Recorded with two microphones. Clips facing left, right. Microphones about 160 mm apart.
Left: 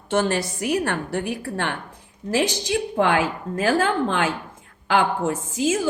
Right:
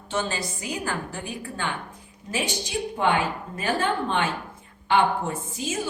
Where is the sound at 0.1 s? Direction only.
70° left (ahead or behind).